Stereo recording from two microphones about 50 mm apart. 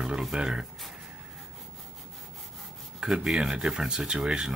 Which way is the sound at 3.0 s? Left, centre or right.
Centre.